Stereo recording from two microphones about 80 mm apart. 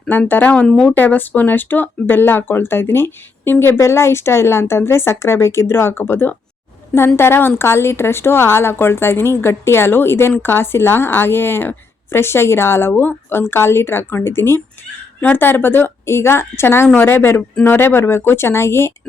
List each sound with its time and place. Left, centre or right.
0.1 s speech: left